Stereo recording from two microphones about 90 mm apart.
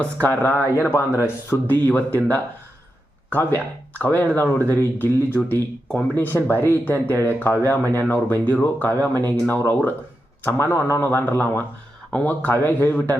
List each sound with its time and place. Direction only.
0.0 s speech: 20° left (ahead or behind)
7.2 s speech: 25° right (ahead or behind)
7.6 s speech: 25° left (ahead or behind)